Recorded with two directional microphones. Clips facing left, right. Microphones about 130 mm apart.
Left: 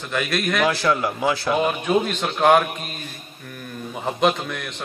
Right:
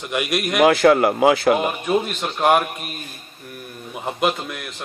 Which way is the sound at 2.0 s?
5° right (ahead or behind).